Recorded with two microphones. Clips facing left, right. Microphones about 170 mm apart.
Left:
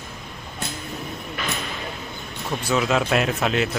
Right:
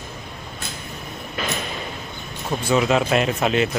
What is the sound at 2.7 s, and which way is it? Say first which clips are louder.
A man's voice: right 2 dB; centre (ahead or behind).